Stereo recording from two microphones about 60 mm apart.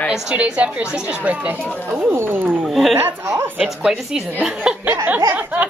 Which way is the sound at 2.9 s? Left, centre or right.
Right.